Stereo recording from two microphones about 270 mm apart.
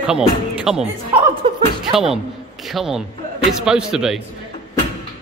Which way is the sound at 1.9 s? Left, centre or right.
Centre.